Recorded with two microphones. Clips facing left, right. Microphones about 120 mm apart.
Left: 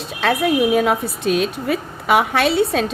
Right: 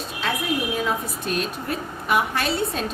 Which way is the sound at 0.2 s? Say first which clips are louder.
Left 9 dB; 70° left (ahead or behind).